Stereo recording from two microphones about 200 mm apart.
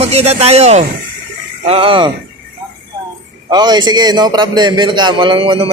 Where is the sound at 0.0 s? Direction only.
30° right (ahead or behind).